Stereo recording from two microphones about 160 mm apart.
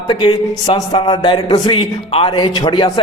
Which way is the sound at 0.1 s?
30° left (ahead or behind).